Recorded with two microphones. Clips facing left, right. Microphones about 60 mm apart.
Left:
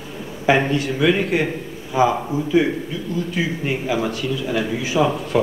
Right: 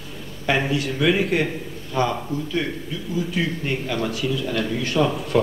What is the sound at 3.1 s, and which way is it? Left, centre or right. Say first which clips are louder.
A man's voice: left 1 dB; centre.